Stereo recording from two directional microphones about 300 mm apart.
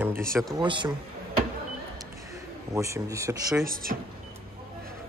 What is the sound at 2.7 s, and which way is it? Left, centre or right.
Speech, centre.